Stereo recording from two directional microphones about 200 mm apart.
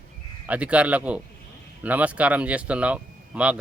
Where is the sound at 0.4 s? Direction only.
5° right (ahead or behind).